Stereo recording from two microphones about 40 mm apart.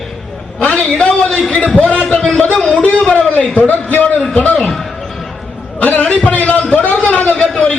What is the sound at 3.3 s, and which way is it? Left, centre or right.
A man's voice, left.